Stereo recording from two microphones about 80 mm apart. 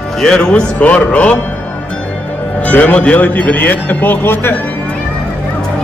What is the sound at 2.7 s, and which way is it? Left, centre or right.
Speech, centre.